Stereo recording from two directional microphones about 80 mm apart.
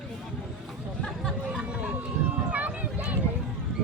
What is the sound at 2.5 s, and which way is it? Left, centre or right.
Run, centre.